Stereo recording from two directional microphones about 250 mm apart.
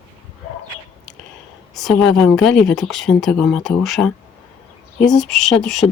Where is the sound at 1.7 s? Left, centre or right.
Centre.